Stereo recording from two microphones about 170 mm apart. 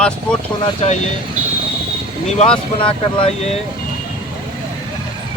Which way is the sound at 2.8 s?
30° left (ahead or behind).